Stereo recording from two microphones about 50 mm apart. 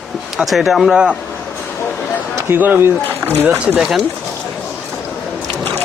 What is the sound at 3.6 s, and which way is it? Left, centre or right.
Speech, centre.